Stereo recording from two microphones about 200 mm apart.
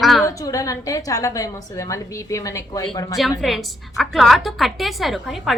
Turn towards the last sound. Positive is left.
turn(degrees=0)  # may be behind; listen again after turning